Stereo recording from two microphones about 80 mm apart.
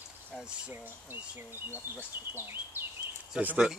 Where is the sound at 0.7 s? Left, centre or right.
Right.